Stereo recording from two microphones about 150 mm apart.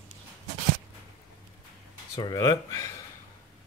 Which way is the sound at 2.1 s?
25° left (ahead or behind).